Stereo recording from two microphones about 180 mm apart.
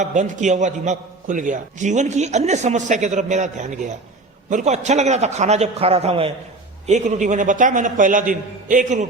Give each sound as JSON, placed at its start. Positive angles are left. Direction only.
{"t": 0.0, "sound": "a man's voice", "side_deg": -40}